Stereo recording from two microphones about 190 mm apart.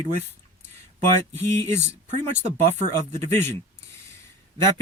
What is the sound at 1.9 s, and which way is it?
Speech, 35° right (ahead or behind).